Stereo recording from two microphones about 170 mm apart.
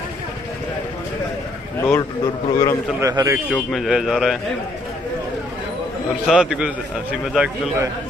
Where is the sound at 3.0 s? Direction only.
20° right (ahead or behind).